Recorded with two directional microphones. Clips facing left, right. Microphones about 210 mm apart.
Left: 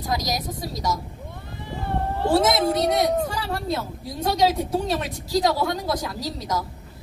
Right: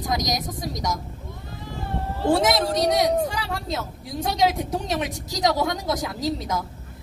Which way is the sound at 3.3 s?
20° right (ahead or behind).